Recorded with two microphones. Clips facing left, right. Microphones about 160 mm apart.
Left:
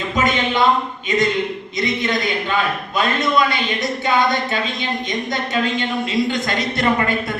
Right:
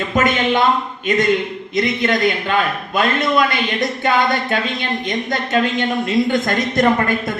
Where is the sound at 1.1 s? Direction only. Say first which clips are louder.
Right 3 dB; 55° right (ahead or behind).